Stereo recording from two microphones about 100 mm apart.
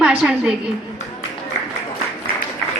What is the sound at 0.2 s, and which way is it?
Speech, 5° right (ahead or behind).